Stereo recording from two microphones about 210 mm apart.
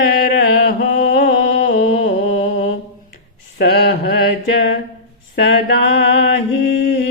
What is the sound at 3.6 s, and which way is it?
Mantra, 55° left (ahead or behind).